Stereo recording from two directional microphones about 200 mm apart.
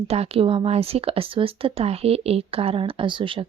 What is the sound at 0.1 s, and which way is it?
Speech, 30° right (ahead or behind).